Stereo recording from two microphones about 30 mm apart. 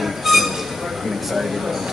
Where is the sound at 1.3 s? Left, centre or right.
Centre.